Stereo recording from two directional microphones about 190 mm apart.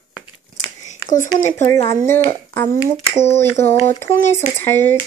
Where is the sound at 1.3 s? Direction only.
20° left (ahead or behind).